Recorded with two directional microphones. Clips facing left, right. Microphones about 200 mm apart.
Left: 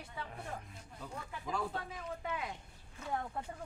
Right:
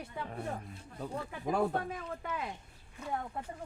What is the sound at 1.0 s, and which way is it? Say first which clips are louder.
Speech: right 7 dB; 55° right (ahead or behind).